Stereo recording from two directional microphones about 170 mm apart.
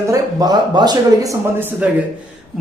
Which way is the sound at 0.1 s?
25° right (ahead or behind).